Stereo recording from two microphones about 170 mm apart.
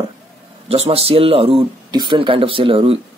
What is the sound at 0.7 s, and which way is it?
Speech, 35° right (ahead or behind).